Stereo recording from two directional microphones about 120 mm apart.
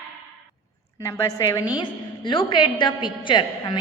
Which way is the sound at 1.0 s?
25° left (ahead or behind).